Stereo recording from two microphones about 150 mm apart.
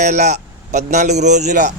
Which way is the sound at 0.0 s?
50° right (ahead or behind).